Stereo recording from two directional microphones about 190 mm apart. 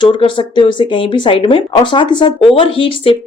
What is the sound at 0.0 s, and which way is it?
Speech, 25° left (ahead or behind).